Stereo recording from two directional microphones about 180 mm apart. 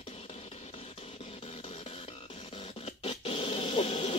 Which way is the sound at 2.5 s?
30° left (ahead or behind).